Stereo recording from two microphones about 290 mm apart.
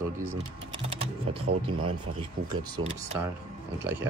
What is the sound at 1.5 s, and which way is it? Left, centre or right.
Speech, right.